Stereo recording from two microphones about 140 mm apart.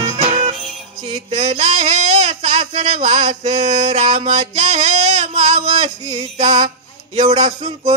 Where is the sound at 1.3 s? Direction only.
50° right (ahead or behind).